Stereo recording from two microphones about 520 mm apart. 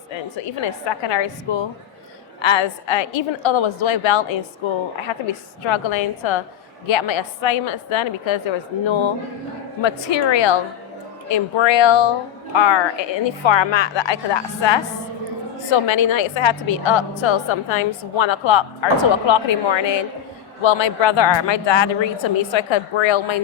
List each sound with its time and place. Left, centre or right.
1.1 s a woman's voice: left